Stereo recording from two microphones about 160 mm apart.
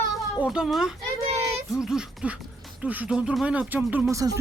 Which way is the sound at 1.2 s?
40° right (ahead or behind).